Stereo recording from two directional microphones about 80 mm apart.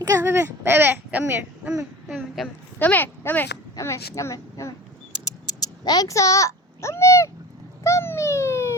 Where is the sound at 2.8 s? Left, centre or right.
Left.